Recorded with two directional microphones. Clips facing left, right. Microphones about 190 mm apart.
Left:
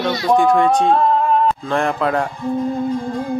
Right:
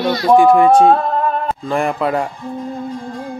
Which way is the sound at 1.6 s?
5° right (ahead or behind).